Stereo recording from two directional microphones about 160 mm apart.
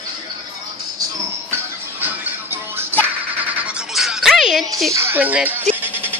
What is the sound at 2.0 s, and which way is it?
Music, 10° right (ahead or behind).